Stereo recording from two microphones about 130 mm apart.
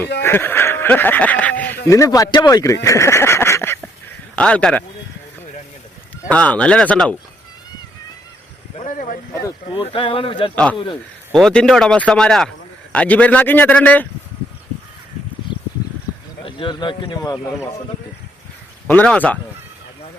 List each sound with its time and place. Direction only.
0.0 s speech: 15° left (ahead or behind)
1.9 s speech: 25° left (ahead or behind)
4.4 s a man's voice: 10° left (ahead or behind)
6.2 s a man's voice: 10° left (ahead or behind)
8.7 s a sound: 80° left
9.7 s speech: 40° left (ahead or behind)
10.5 s a man's voice: 10° left (ahead or behind)
15.5 s a sound: 40° left (ahead or behind)
16.5 s speech: 40° left (ahead or behind)
17.2 s a man's voice: 25° left (ahead or behind)
18.9 s a man's voice: 10° left (ahead or behind)